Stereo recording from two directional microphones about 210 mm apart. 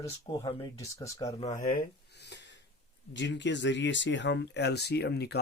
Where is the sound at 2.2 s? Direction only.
55° left (ahead or behind).